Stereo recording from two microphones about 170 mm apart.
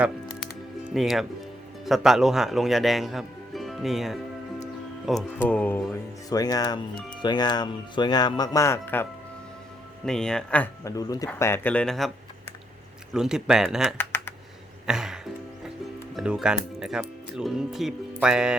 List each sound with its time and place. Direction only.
0.9 s speech: centre (ahead or behind)
5.4 s speech: 10° left (ahead or behind)
6.9 s speech: 5° left (ahead or behind)
7.2 s speech: 25° left (ahead or behind)
10.1 s speech: 5° left (ahead or behind)
10.9 s speech: 20° left (ahead or behind); by 12.1 s centre (ahead or behind)
13.1 s speech: 5° right (ahead or behind)
14.0 s computer keyboard: 15° left (ahead or behind)
14.8 s music: 5° right (ahead or behind)
16.1 s speech: 5° right (ahead or behind)